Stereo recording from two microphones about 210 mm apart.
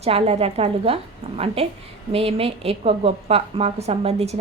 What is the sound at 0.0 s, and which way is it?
Speech, 30° right (ahead or behind).